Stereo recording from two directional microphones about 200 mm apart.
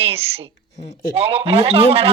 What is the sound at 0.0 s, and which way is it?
A woman's voice, 30° right (ahead or behind).